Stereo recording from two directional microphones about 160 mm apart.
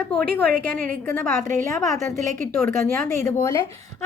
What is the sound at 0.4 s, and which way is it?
Speech, 65° right (ahead or behind).